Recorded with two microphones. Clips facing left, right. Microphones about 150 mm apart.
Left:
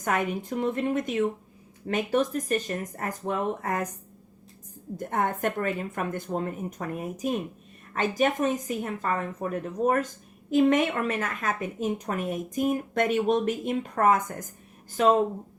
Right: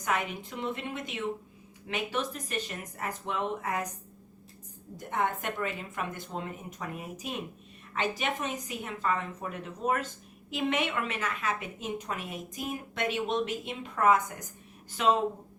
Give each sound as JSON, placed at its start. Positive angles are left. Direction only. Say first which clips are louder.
{"t": 0.0, "sound": "a woman's voice", "louder": "left 4 dB", "side_deg": 50}
{"t": 4.9, "sound": "a woman's voice", "louder": "left 3 dB", "side_deg": 45}